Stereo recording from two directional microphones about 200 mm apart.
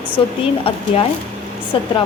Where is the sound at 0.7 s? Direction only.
25° left (ahead or behind).